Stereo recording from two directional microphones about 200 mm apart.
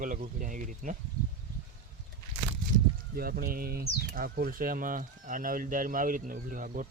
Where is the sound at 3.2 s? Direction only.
50° right (ahead or behind).